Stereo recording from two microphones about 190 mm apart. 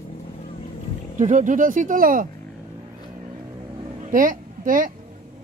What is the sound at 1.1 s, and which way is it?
Speech, 40° right (ahead or behind).